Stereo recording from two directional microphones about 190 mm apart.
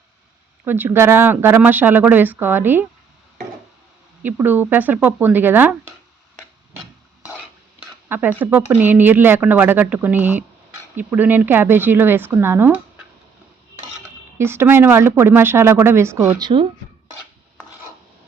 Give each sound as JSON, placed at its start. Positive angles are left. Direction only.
{"t": 0.6, "sound": "speech", "side_deg": -10}
{"t": 4.2, "sound": "speech", "side_deg": -10}
{"t": 8.1, "sound": "speech", "side_deg": -10}
{"t": 14.3, "sound": "speech", "side_deg": -15}
{"t": 16.4, "sound": "speech", "side_deg": -25}